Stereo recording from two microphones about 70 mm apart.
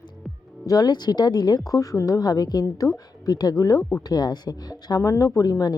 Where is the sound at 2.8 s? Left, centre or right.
Left.